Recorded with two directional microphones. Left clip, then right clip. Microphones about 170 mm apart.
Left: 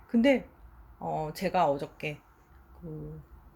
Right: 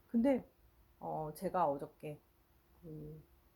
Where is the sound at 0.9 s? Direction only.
Centre (ahead or behind).